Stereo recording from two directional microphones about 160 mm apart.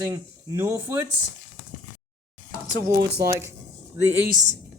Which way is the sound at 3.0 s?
85° right.